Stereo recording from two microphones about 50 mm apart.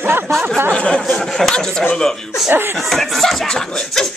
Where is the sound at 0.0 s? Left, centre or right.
Right.